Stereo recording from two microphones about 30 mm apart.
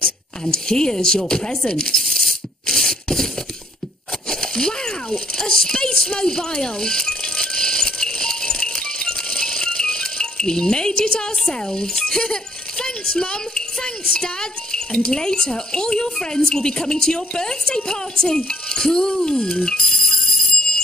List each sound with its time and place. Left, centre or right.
0.0 s a child's voice: left
2.0 s a sound: centre
4.3 s a sound: left
8.7 s rattle: left
9.8 s a child's voice: left
19.6 s alarm clock: centre